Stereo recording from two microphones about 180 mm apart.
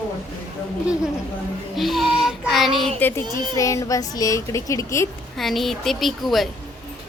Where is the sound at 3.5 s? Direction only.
15° left (ahead or behind).